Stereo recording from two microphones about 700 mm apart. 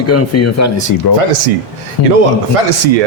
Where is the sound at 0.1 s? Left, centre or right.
Left.